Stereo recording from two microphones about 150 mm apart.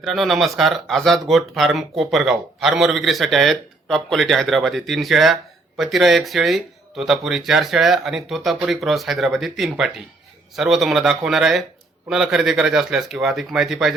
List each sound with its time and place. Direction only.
0.0 s speech: centre (ahead or behind)